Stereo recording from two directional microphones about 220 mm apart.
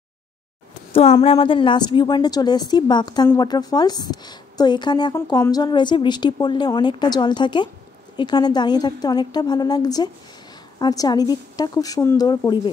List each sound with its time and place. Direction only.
0.9 s a woman's voice: 25° left (ahead or behind)